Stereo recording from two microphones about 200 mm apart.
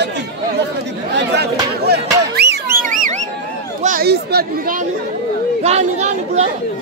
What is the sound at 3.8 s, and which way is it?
Speech, 45° right (ahead or behind).